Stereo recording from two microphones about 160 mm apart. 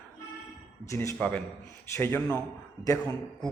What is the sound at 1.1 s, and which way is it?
A man's voice, 5° left (ahead or behind).